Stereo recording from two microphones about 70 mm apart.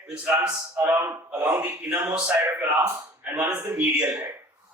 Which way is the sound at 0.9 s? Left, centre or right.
Right.